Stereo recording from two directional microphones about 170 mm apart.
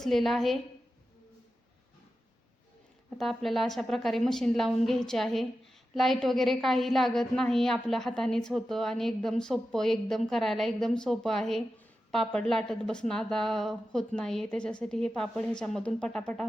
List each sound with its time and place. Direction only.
0.0 s a woman's voice: centre (ahead or behind)
3.2 s a woman's voice: centre (ahead or behind)